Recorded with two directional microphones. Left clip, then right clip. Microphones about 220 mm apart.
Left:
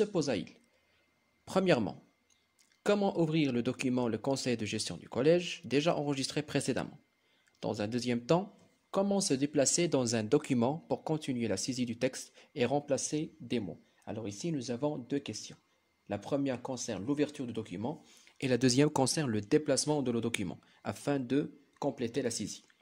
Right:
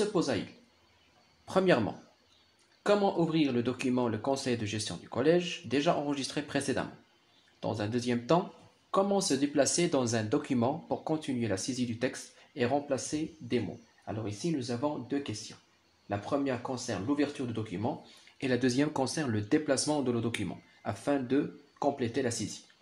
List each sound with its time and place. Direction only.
0.0 s speech: 45° left (ahead or behind)
1.4 s speech: 45° left (ahead or behind)